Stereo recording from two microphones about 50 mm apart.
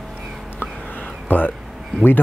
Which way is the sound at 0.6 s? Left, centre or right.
Left.